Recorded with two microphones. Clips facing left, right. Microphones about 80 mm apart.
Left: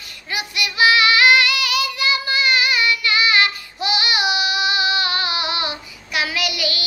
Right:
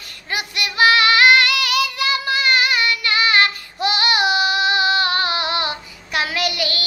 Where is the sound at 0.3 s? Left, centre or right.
Right.